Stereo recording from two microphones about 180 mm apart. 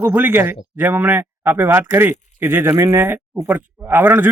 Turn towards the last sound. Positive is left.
turn(degrees=-10)  # may be behind; listen again after turning